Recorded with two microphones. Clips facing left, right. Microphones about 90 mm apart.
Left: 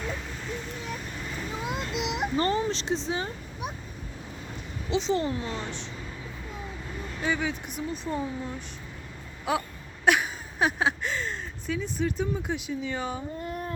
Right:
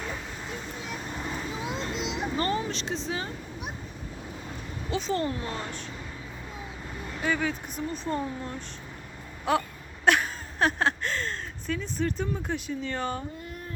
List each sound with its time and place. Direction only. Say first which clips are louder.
1.6 s a sound: left 3 dB; 60° left (ahead or behind)
2.4 s speech: left 2 dB; 30° left (ahead or behind)
4.9 s speech: left 2 dB; 20° left (ahead or behind)
7.3 s speech: right 1 dB; 15° left (ahead or behind)